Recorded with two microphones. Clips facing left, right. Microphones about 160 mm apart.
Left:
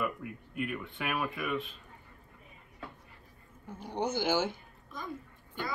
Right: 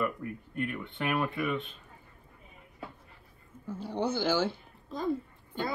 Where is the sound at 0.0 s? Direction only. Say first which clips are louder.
Right 3 dB; 5° left (ahead or behind).